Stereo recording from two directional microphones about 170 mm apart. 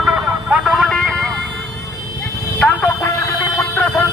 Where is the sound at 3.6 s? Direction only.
10° left (ahead or behind).